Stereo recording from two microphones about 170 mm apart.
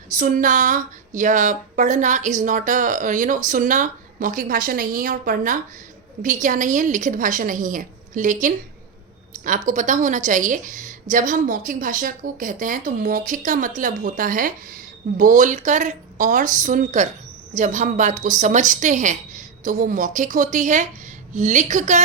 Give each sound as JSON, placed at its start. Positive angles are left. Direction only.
{"t": 0.2, "sound": "a woman's voice", "side_deg": -50}